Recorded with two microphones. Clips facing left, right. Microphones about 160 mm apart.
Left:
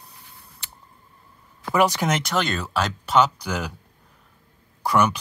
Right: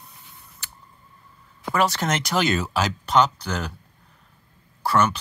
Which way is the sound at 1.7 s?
15° left (ahead or behind).